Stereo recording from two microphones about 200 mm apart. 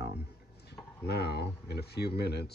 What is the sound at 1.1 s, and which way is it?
Speech, 55° left (ahead or behind).